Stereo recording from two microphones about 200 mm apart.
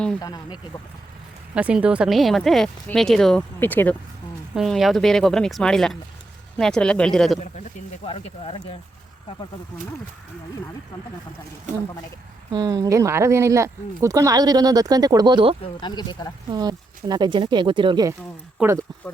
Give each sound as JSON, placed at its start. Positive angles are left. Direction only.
{"t": 0.2, "sound": "speech", "side_deg": 20}
{"t": 1.5, "sound": "speech", "side_deg": -5}
{"t": 4.5, "sound": "speech", "side_deg": 0}
{"t": 7.3, "sound": "speech", "side_deg": 35}
{"t": 12.5, "sound": "speech", "side_deg": -15}
{"t": 15.6, "sound": "speech", "side_deg": 20}
{"t": 16.5, "sound": "speech", "side_deg": -20}